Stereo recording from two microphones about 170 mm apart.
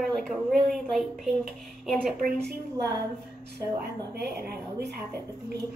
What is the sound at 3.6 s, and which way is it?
Speech, 70° right (ahead or behind).